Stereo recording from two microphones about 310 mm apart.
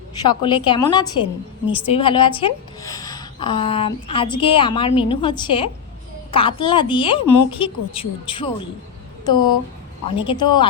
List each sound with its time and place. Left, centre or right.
0.2 s a woman's voice: centre
1.2 s a woman's voice: centre
1.9 s a woman's voice: centre
10.2 s a woman's voice: centre